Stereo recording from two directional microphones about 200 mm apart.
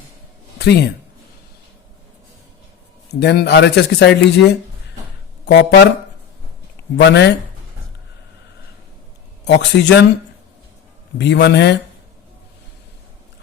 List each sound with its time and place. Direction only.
0.6 s a man's voice: 55° left (ahead or behind)
3.2 s speech: 55° left (ahead or behind)
5.5 s speech: 60° left (ahead or behind)
6.9 s speech: 60° left (ahead or behind)
9.5 s speech: 60° left (ahead or behind)
11.2 s speech: 60° left (ahead or behind)